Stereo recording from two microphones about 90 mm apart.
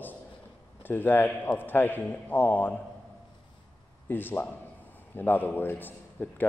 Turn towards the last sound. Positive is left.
turn(degrees=20)  # may be behind; listen again after turning